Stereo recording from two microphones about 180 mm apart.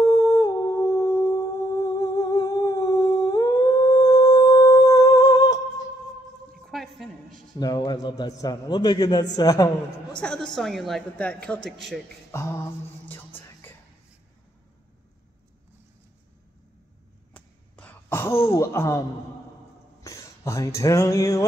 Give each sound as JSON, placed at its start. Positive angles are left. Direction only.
{"t": 0.0, "sound": "music", "side_deg": 20}
{"t": 4.2, "sound": "humming", "side_deg": 20}
{"t": 6.6, "sound": "a sound", "side_deg": 0}
{"t": 7.5, "sound": "a man's voice", "side_deg": 25}
{"t": 10.2, "sound": "a woman's voice", "side_deg": 5}
{"t": 12.3, "sound": "mantra", "side_deg": 15}
{"t": 13.0, "sound": "music", "side_deg": 10}
{"t": 17.3, "sound": "a sound", "side_deg": 10}
{"t": 18.5, "sound": "speech", "side_deg": 15}
{"t": 20.0, "sound": "a sound", "side_deg": 15}